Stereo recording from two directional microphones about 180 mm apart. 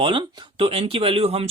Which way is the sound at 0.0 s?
25° right (ahead or behind).